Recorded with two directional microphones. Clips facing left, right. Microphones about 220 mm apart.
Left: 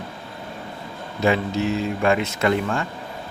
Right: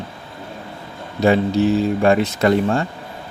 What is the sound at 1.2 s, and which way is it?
A man's voice, 35° right (ahead or behind).